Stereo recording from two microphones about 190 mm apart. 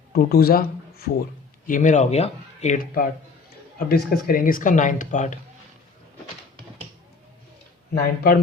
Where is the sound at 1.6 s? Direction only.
40° left (ahead or behind).